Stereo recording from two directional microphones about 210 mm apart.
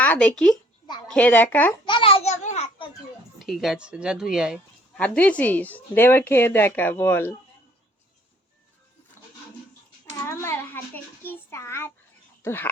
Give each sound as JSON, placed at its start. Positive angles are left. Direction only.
{"t": 0.0, "sound": "speech", "side_deg": 5}
{"t": 1.9, "sound": "a sound", "side_deg": 25}
{"t": 3.3, "sound": "speech", "side_deg": 0}
{"t": 9.2, "sound": "a sound", "side_deg": 10}
{"t": 10.2, "sound": "child singing", "side_deg": 10}
{"t": 12.4, "sound": "speech", "side_deg": 10}